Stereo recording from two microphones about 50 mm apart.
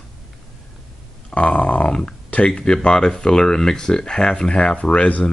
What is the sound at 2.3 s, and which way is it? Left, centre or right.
Speech, left.